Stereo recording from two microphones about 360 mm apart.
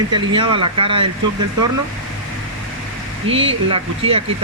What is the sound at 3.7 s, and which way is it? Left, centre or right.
Speech, centre.